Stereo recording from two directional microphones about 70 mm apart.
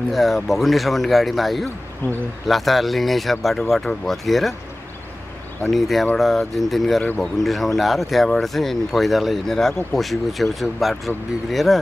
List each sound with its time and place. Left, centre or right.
0.1 s speech: centre
2.0 s speech: left
2.4 s speech: centre
5.7 s speech: centre